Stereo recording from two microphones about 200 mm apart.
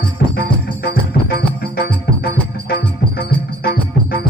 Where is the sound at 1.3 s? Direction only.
55° left (ahead or behind).